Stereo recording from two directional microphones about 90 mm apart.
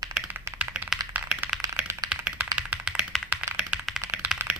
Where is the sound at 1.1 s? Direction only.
15° right (ahead or behind).